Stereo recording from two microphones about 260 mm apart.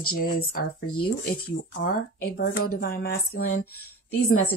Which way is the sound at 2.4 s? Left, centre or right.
Left.